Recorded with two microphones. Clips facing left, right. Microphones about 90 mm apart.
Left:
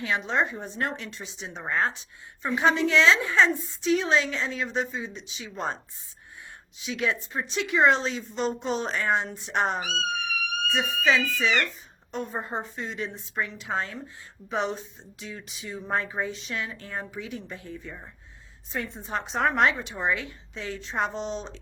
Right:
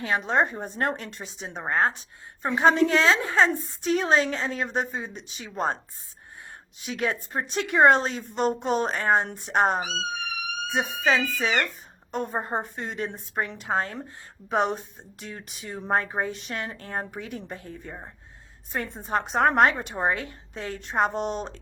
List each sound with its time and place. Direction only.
0.0 s speech: 45° right (ahead or behind)